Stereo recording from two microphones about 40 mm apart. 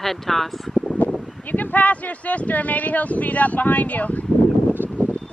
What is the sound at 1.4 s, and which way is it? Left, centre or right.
Speech, left.